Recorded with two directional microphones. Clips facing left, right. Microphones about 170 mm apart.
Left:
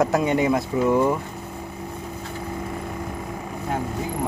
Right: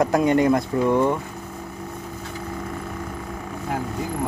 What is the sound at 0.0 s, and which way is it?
Speech, centre (ahead or behind).